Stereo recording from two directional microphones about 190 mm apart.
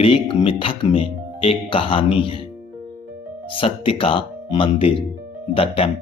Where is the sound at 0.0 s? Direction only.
30° left (ahead or behind).